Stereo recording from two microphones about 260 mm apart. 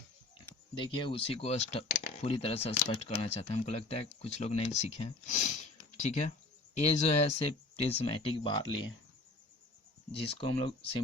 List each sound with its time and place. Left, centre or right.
0.8 s speech: centre
10.1 s speech: left